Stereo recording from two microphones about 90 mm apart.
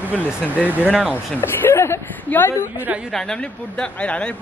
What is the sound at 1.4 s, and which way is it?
Speech, 30° left (ahead or behind).